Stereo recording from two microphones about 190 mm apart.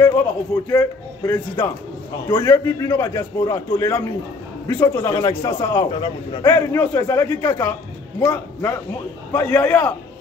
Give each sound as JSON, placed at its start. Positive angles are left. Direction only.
{"t": 0.0, "sound": "a man's voice", "side_deg": 15}